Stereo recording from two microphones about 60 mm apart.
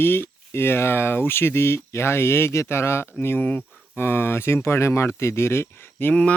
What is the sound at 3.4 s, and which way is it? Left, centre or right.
Speech, left.